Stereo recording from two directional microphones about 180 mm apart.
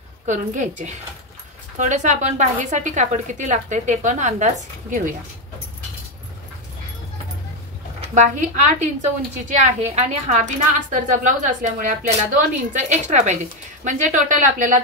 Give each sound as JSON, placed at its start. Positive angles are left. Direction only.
{"t": 0.3, "sound": "a woman's voice", "side_deg": -40}
{"t": 8.0, "sound": "a woman's voice", "side_deg": -40}
{"t": 9.9, "sound": "a woman's voice", "side_deg": -40}